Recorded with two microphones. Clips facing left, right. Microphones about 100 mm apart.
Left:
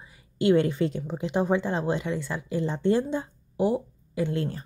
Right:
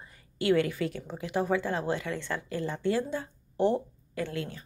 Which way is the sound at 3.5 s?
10° left (ahead or behind).